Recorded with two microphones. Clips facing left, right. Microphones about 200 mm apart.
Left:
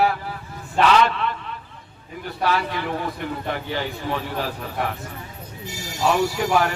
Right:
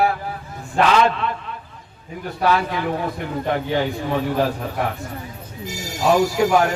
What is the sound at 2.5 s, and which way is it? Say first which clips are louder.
Speech: right 4 dB; 45° right (ahead or behind).